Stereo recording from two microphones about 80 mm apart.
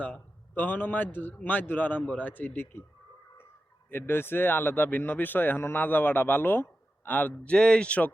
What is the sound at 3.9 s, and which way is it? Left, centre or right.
Speech, left.